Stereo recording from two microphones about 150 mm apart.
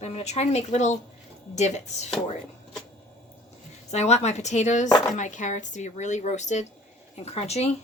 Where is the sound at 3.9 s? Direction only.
50° left (ahead or behind).